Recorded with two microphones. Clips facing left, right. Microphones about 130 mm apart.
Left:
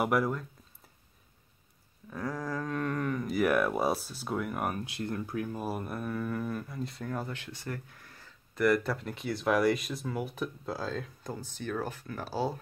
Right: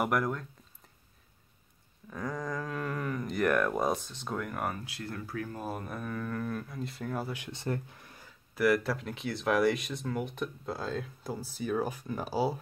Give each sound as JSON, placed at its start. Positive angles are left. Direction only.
{"t": 0.0, "sound": "speech", "side_deg": 5}
{"t": 2.0, "sound": "speech", "side_deg": 5}
{"t": 7.5, "sound": "speech", "side_deg": -25}
{"t": 8.5, "sound": "speech", "side_deg": 0}